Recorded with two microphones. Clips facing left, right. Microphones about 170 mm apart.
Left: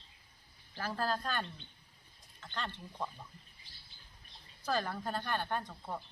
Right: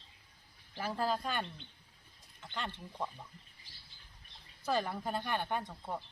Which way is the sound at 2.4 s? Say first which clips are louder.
Even; 15° right (ahead or behind).